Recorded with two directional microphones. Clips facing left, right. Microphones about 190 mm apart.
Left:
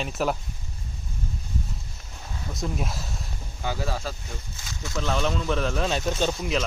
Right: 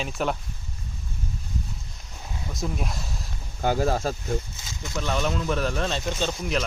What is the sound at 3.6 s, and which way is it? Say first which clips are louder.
Speech: right 7 dB; 45° right (ahead or behind).